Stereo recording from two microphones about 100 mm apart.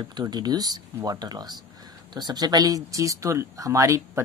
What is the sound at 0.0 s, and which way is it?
Speech, 45° right (ahead or behind).